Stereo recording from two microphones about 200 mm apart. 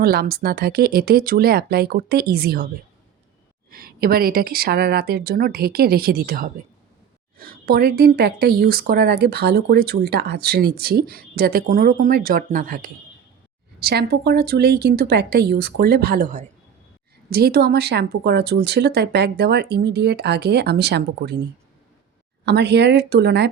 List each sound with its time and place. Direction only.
0.0 s speech: 50° right (ahead or behind)
3.7 s speech: 50° right (ahead or behind)
22.4 s speech: 55° right (ahead or behind)